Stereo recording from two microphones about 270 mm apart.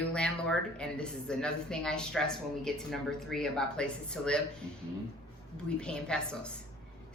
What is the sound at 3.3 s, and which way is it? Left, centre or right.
A woman's voice, centre.